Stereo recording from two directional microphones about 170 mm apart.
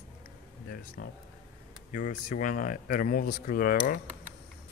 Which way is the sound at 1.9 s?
50° left (ahead or behind).